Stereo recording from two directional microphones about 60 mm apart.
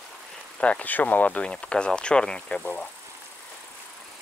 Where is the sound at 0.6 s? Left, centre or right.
Left.